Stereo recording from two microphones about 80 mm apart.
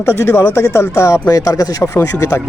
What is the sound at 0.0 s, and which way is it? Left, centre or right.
Speech, left.